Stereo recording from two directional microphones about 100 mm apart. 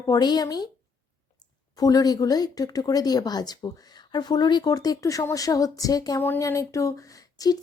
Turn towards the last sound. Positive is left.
turn(degrees=35)  # may be behind; listen again after turning